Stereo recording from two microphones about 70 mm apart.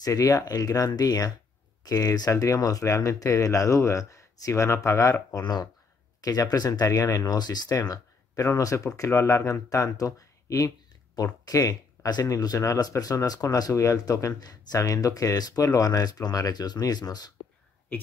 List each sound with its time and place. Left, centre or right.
0.0 s speech: left
2.4 s speech: left
5.4 s speech: left
6.2 s speech: left
8.4 s speech: left
12.1 s speech: left